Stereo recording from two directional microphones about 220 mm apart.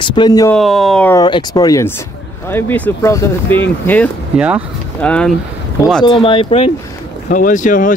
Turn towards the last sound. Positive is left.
turn(degrees=35)  # may be behind; listen again after turning